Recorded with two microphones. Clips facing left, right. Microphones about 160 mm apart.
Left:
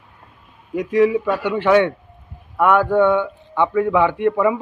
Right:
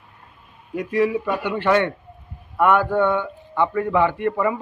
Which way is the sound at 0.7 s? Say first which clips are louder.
Left 4 dB; centre (ahead or behind).